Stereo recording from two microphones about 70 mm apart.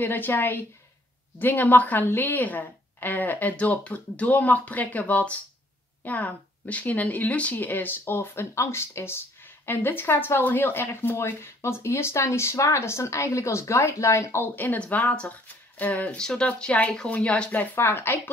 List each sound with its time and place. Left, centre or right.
0.0 s a woman's voice: left
14.4 s a woman's voice: left
17.7 s a woman's voice: left